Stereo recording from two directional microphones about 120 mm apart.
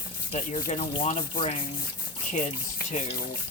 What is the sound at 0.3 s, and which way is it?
Rub, 65° left (ahead or behind).